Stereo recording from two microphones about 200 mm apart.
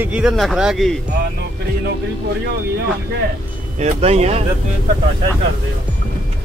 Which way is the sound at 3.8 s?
30° right (ahead or behind).